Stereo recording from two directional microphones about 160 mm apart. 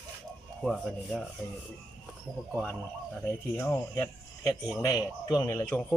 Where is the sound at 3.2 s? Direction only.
10° left (ahead or behind).